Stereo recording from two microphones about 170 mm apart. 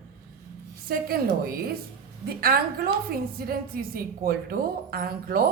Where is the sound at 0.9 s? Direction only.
65° right (ahead or behind).